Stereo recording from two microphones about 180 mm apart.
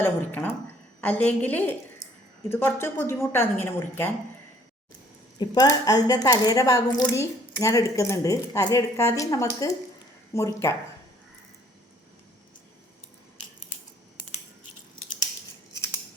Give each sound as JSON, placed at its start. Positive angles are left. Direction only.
{"t": 0.0, "sound": "a woman's voice", "side_deg": 10}
{"t": 5.4, "sound": "a woman's voice", "side_deg": 20}